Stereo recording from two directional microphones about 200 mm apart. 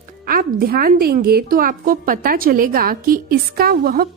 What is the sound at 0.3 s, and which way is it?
A woman's voice, 45° right (ahead or behind).